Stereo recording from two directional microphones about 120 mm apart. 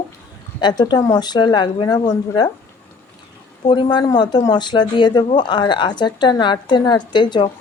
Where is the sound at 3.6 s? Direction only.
40° left (ahead or behind).